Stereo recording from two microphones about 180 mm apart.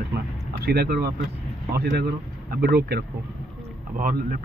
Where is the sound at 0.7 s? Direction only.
60° right (ahead or behind).